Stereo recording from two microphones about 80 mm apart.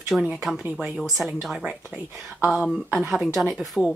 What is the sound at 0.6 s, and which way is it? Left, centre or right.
Speech, right.